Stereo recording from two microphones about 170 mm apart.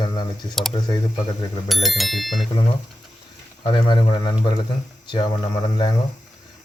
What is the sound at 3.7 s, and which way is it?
Speech, 25° left (ahead or behind).